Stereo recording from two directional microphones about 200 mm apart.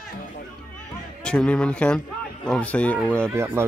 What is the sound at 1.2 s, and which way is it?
Speech, 5° left (ahead or behind).